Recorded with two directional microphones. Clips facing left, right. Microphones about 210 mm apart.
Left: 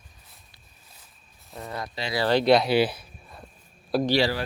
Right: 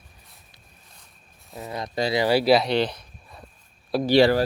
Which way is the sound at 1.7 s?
20° right (ahead or behind).